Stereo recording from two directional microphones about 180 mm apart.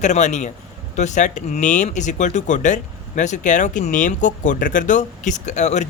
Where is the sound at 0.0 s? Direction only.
40° left (ahead or behind).